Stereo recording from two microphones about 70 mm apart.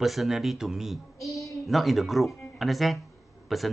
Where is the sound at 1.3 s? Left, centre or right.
Left.